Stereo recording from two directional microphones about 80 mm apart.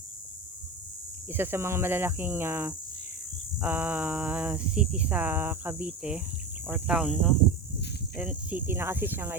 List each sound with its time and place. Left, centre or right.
1.3 s speech: right